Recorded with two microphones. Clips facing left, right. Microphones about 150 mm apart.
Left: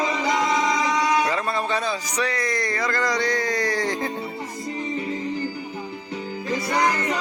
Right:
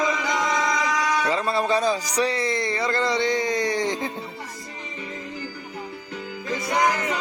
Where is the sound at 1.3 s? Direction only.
25° right (ahead or behind).